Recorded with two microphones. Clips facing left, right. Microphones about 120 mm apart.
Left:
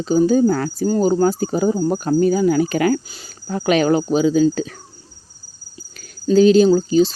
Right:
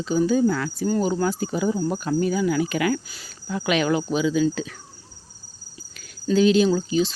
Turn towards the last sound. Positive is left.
turn(degrees=35)  # may be behind; listen again after turning